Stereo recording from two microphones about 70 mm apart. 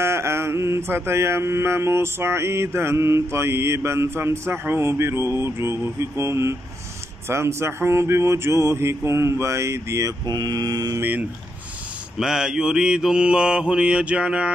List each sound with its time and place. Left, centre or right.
0.0 s mantra: right
10.2 s mantra: right
11.0 s speech: right
12.2 s mantra: centre